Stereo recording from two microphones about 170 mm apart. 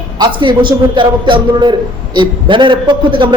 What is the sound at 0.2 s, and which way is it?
A man's voice, 30° right (ahead or behind).